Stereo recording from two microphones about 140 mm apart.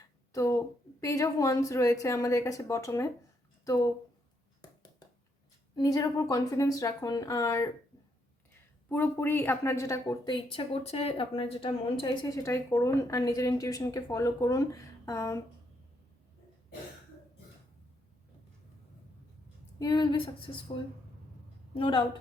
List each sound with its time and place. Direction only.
1.0 s speech: 25° left (ahead or behind)
5.7 s speech: 25° left (ahead or behind)
8.9 s speech: 15° left (ahead or behind)
10.2 s speech: 40° left (ahead or behind); by 15.4 s 20° left (ahead or behind)
19.8 s speech: 30° left (ahead or behind)
21.8 s speech: 35° left (ahead or behind)